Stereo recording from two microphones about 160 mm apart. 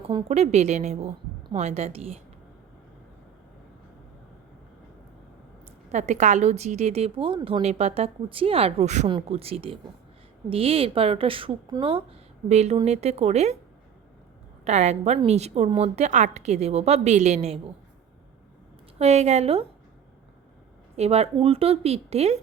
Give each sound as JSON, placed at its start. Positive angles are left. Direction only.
{"t": 0.3, "sound": "a woman's voice", "side_deg": -45}
{"t": 5.9, "sound": "a woman's voice", "side_deg": -50}
{"t": 12.5, "sound": "a woman's voice", "side_deg": -45}
{"t": 14.6, "sound": "a woman's voice", "side_deg": -45}
{"t": 18.9, "sound": "a woman's voice", "side_deg": -45}
{"t": 20.9, "sound": "a woman's voice", "side_deg": -40}